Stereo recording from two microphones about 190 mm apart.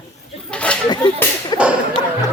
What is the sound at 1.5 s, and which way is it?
Whip, 20° left (ahead or behind).